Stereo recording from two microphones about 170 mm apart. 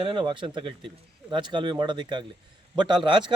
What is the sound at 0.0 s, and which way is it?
A man's voice, 30° right (ahead or behind).